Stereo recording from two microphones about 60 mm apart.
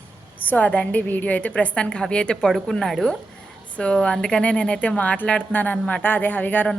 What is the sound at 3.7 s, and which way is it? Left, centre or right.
A woman's voice, centre.